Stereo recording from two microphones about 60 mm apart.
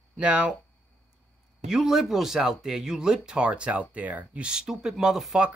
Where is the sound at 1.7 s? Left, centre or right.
Centre.